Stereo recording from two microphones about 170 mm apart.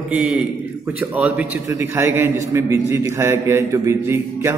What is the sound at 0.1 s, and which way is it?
A man's voice, 10° right (ahead or behind).